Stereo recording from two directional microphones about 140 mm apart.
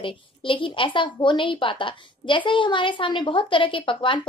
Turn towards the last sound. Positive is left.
turn(degrees=35)  # may be behind; listen again after turning